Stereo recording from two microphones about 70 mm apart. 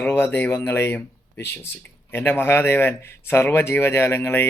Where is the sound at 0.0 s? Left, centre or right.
Left.